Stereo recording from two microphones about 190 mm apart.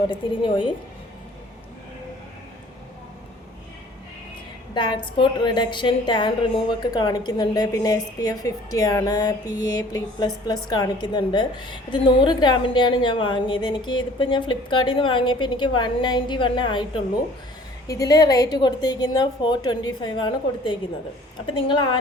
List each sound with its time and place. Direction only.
0.1 s a woman's voice: 25° left (ahead or behind)
4.7 s a woman's voice: 25° left (ahead or behind)